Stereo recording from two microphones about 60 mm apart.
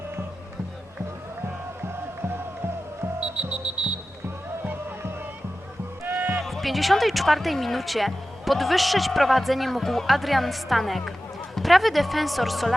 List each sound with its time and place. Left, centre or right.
6.1 s music: right
6.4 s speech: centre